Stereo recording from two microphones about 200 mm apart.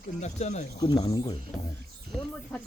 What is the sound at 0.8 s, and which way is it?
Speech, 20° left (ahead or behind).